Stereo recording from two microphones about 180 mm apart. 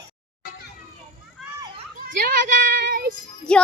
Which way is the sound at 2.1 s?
55° right (ahead or behind).